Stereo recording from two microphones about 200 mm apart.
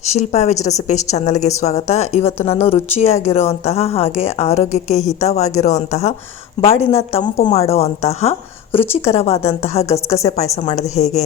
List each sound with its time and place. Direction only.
0.0 s a woman's voice: 35° left (ahead or behind)